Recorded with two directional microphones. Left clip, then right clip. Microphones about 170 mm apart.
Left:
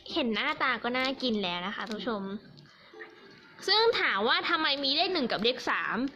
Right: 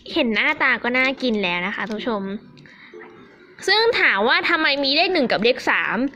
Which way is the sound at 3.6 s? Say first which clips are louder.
Right 8 dB; 15° right (ahead or behind).